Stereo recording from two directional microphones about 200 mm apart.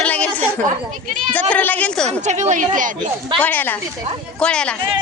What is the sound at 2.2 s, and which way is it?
Speech, 35° right (ahead or behind).